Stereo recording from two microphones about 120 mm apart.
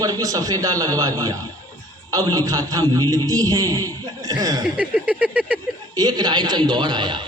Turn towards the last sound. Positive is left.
turn(degrees=-40)  # may be behind; listen again after turning